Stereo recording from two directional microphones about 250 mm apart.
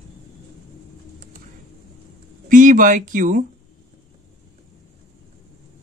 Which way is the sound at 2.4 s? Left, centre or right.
Right.